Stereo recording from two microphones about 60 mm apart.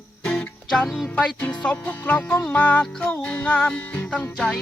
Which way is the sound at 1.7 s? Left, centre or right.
Left.